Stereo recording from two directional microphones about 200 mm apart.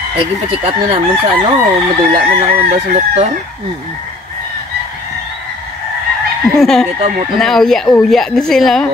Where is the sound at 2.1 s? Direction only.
50° right (ahead or behind).